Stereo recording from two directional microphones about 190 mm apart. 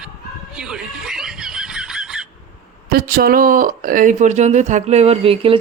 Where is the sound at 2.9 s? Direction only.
50° right (ahead or behind).